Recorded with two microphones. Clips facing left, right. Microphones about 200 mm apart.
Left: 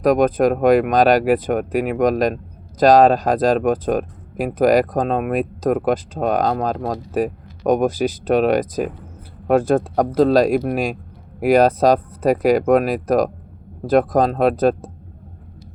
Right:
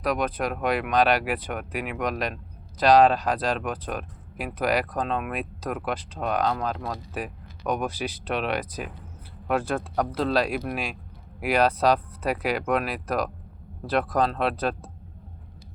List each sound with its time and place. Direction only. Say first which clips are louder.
0.0 s speech: left 11 dB; 45° left (ahead or behind)